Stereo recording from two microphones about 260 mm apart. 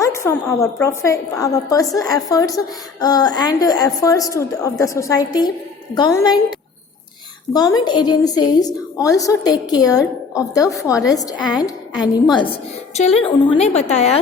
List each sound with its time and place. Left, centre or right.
0.0 s a woman's voice: centre
7.5 s a woman's voice: centre